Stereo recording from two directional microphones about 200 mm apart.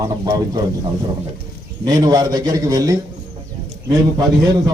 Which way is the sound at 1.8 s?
20° right (ahead or behind).